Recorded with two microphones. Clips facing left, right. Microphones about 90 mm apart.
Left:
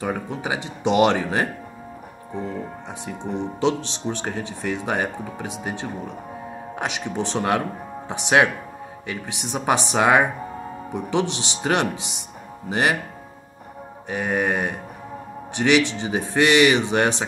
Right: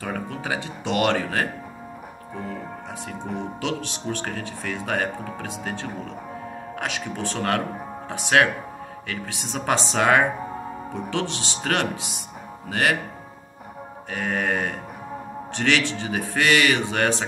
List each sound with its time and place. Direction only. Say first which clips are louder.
0.0 s speech: left 3 dB; 20° left (ahead or behind)
3.1 s speech: left 4 dB; 20° left (ahead or behind)
14.1 s speech: left 2 dB; 15° left (ahead or behind)